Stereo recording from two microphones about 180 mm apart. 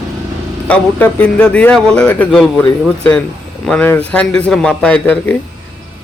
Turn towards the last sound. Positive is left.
turn(degrees=10)  # may be behind; listen again after turning